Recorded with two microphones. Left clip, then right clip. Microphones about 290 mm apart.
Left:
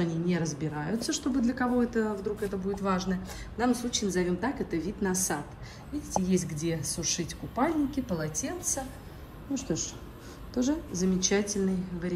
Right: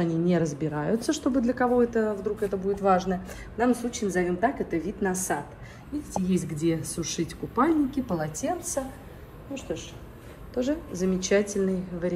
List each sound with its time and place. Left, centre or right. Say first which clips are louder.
0.0 s a woman's voice: right 6 dB; centre
9.5 s a woman's voice: left 1 dB; centre